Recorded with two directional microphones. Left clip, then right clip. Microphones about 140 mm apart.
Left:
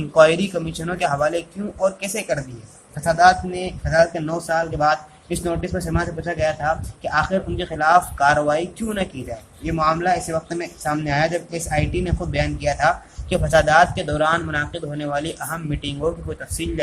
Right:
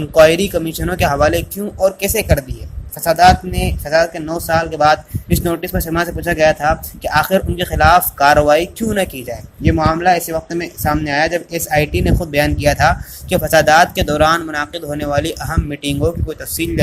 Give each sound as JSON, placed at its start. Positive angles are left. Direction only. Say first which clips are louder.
{"t": 0.1, "sound": "speech", "louder": "right 5 dB", "side_deg": -40}